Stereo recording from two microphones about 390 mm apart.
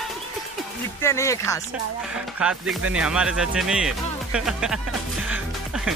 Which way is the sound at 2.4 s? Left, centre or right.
Centre.